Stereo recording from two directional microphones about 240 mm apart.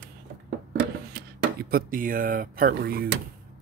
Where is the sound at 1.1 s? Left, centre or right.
Right.